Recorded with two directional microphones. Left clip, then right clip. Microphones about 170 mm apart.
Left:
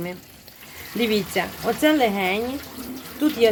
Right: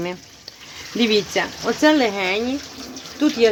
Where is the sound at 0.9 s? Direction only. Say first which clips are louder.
Right 4 dB; 40° right (ahead or behind).